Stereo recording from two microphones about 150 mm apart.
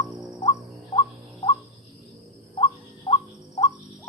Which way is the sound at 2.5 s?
35° left (ahead or behind).